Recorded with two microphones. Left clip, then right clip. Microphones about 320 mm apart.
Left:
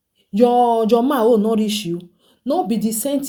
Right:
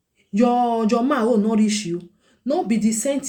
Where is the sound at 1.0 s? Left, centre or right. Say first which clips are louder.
Left 4 dB; left.